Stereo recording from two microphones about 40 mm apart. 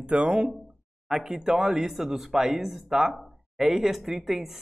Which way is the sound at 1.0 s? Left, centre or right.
Centre.